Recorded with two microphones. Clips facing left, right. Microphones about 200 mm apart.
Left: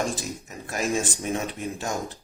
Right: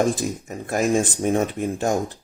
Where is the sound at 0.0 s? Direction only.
55° right (ahead or behind).